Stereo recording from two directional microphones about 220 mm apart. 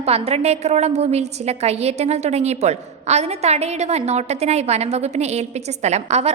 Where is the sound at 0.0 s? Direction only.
30° right (ahead or behind).